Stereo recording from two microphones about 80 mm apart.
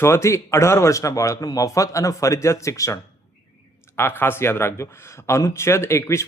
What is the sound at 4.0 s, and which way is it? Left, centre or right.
Speech, left.